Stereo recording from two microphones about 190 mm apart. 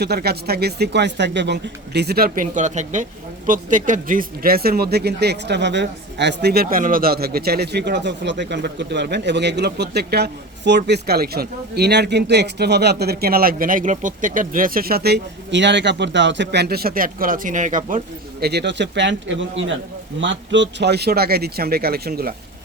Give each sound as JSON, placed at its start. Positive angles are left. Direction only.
{"t": 0.0, "sound": "speech", "side_deg": -55}